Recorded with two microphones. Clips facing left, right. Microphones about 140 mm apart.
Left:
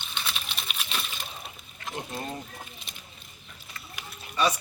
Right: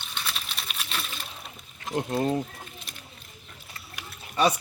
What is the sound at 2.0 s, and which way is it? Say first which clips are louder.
Speech: right 10 dB; 70° right (ahead or behind).